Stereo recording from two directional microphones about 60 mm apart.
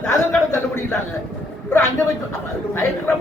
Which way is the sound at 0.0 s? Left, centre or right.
Left.